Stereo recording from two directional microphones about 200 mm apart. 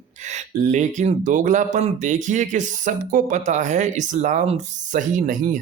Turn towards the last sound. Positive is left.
turn(degrees=-40)  # may be behind; listen again after turning